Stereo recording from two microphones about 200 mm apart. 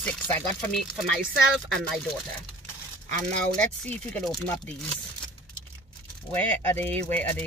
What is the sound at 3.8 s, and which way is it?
Speech, 5° left (ahead or behind).